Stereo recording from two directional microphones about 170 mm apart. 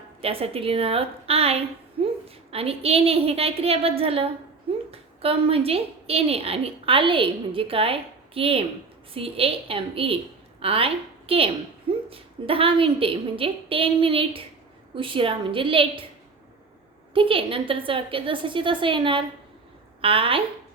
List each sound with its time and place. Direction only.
0.2 s a woman's voice: 35° right (ahead or behind)
17.2 s a woman's voice: 30° right (ahead or behind)